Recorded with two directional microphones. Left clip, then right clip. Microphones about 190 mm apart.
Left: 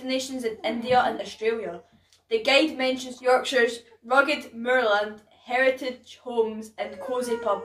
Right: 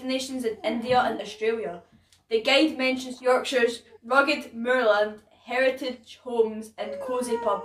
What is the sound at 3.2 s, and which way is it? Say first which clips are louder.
Speech: left 1 dB; 15° right (ahead or behind).